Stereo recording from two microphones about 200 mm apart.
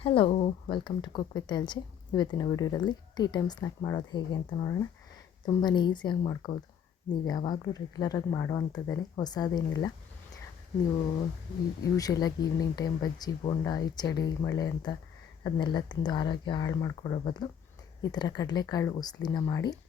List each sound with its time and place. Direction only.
0.0 s speech: 25° left (ahead or behind)
11.9 s speech: 20° left (ahead or behind)